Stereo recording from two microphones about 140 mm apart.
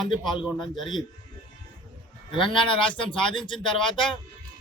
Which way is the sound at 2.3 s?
35° left (ahead or behind).